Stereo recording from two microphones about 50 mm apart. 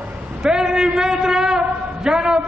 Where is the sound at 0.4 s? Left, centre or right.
Centre.